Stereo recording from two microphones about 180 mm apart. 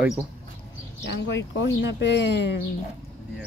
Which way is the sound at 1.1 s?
90° left.